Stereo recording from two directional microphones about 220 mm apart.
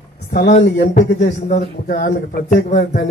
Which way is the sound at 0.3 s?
35° left (ahead or behind).